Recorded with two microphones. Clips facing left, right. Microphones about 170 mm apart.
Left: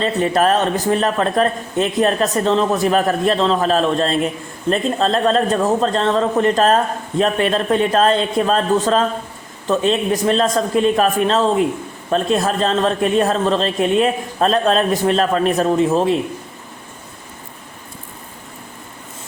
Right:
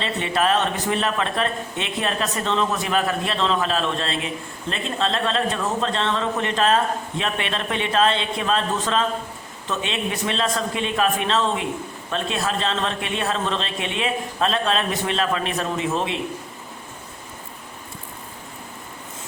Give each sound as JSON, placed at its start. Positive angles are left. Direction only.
{"t": 0.0, "sound": "speech", "side_deg": 40}